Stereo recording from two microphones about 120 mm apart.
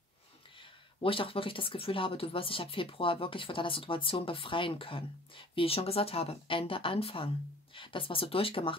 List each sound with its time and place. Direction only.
0.6 s speech: 50° left (ahead or behind)